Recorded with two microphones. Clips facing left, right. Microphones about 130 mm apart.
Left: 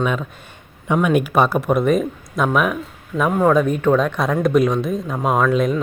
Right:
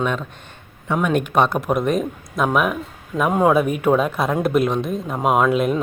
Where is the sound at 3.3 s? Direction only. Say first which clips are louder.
Left 1 dB; 10° right (ahead or behind).